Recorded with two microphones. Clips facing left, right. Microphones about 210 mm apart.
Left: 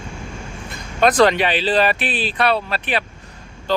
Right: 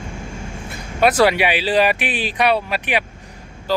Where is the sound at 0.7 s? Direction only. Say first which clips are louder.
Even; 10° right (ahead or behind).